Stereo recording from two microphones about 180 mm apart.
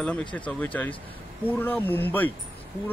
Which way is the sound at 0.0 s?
5° left (ahead or behind).